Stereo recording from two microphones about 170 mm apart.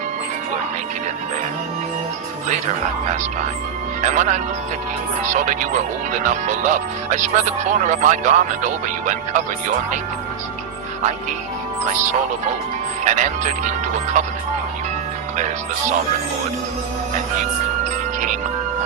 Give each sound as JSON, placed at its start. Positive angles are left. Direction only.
{"t": 4.0, "sound": "speech", "side_deg": -45}
{"t": 13.1, "sound": "speech", "side_deg": -45}